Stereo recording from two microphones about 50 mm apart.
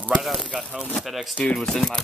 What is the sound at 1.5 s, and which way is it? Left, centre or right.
Speech, centre.